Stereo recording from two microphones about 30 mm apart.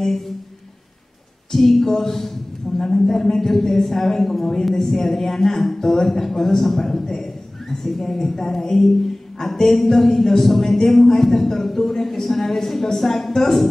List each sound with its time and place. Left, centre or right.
1.5 s a man's voice: centre